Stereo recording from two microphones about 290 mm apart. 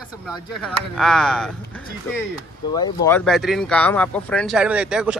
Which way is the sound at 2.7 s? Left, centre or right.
Centre.